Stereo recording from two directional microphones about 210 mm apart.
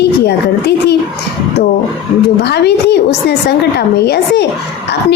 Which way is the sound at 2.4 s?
50° left (ahead or behind).